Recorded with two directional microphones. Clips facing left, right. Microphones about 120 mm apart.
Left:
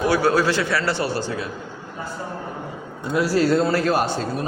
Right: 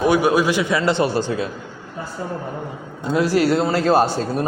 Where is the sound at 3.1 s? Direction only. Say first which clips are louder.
Right 1 dB; 20° right (ahead or behind).